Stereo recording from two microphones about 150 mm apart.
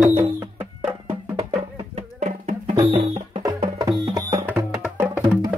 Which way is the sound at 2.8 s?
35° right (ahead or behind).